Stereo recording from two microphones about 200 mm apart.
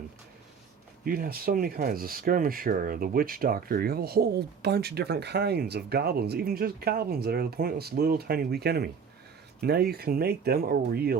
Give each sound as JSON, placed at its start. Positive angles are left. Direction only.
{"t": 1.0, "sound": "speech", "side_deg": -50}